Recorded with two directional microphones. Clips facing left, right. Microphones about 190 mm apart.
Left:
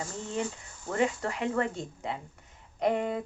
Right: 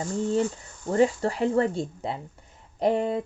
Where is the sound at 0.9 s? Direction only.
35° right (ahead or behind).